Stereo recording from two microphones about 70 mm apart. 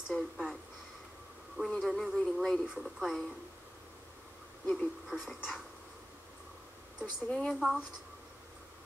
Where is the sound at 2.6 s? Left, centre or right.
Centre.